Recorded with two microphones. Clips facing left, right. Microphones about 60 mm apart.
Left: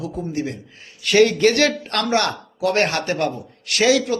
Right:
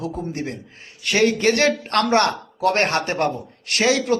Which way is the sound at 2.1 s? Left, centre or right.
Right.